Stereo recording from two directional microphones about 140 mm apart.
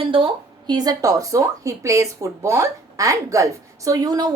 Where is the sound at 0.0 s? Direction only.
40° right (ahead or behind).